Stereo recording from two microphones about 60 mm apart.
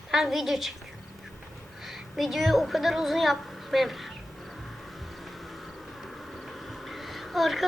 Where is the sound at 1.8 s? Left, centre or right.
Centre.